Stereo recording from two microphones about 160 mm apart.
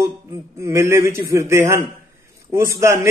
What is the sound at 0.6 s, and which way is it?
A man's voice, 15° right (ahead or behind).